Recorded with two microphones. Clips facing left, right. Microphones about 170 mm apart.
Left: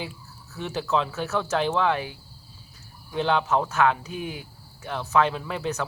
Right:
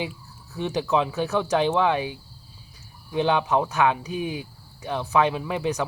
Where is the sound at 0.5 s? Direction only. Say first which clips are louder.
Right 3 dB; 15° right (ahead or behind).